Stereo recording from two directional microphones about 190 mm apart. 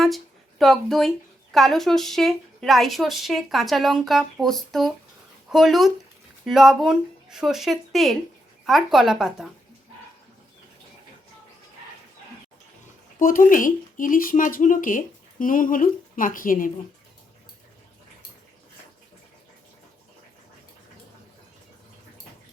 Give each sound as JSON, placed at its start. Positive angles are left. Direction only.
{"t": 0.6, "sound": "a woman's voice", "side_deg": 0}
{"t": 13.1, "sound": "speech", "side_deg": 45}